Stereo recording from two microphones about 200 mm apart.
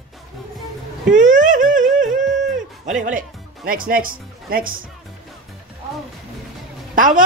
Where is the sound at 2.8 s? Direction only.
40° right (ahead or behind).